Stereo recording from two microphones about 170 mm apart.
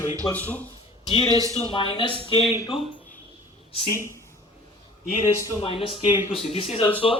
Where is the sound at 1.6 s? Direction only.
30° left (ahead or behind).